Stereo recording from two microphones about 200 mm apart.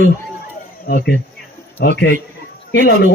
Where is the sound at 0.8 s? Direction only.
55° left (ahead or behind).